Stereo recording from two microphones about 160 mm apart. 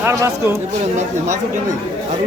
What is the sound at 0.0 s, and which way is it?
Speech, 15° right (ahead or behind).